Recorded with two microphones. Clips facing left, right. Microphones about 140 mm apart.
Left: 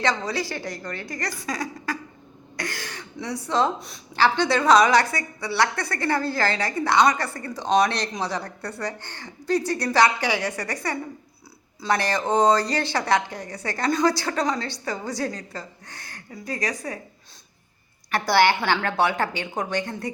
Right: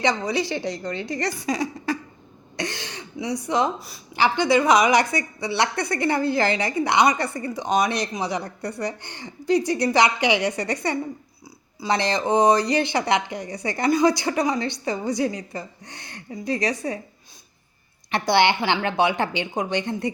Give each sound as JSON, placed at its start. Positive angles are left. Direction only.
{"t": 0.0, "sound": "a woman's voice", "side_deg": -15}
{"t": 3.8, "sound": "a woman's voice", "side_deg": -5}
{"t": 4.1, "sound": "a woman's voice", "side_deg": -15}
{"t": 18.1, "sound": "a woman's voice", "side_deg": -20}